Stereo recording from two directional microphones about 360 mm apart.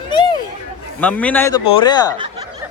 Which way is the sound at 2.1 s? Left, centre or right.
Centre.